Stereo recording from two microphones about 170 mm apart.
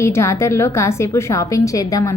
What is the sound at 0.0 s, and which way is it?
A woman's voice, 15° left (ahead or behind).